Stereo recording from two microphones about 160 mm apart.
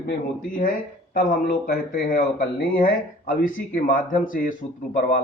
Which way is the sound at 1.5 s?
65° left (ahead or behind).